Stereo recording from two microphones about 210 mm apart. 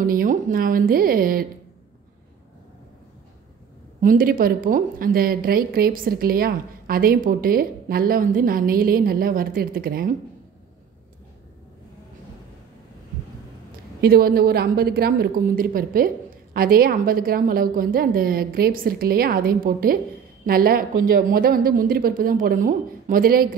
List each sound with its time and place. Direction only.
0.0 s a woman's voice: 45° right (ahead or behind)
4.0 s a woman's voice: 40° right (ahead or behind)
14.0 s a woman's voice: 45° right (ahead or behind)